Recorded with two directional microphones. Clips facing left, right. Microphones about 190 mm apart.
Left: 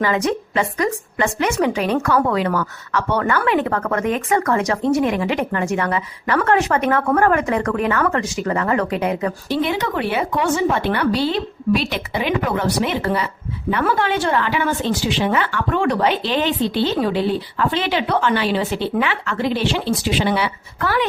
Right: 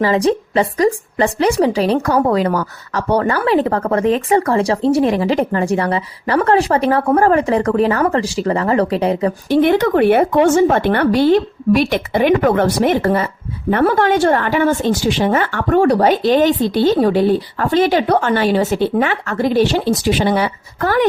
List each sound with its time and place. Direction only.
0.0 s a woman's voice: 35° right (ahead or behind)
9.5 s speech: 55° right (ahead or behind)